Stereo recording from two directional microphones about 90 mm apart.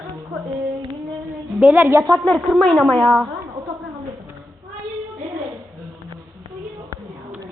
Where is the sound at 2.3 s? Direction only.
5° left (ahead or behind).